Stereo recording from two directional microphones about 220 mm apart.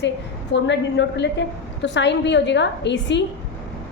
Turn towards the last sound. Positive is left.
turn(degrees=55)  # may be behind; listen again after turning